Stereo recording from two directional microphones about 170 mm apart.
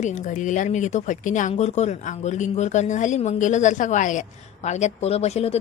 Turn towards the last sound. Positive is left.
turn(degrees=40)  # may be behind; listen again after turning